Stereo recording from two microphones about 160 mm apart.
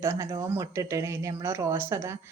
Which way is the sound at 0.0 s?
15° right (ahead or behind).